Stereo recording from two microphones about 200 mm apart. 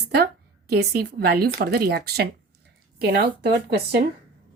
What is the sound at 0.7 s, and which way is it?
Speech, 55° right (ahead or behind).